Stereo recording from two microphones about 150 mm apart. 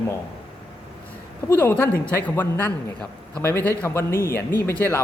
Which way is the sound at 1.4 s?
15° left (ahead or behind).